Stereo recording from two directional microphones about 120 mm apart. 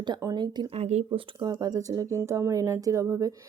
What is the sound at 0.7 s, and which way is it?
Speech, 65° right (ahead or behind).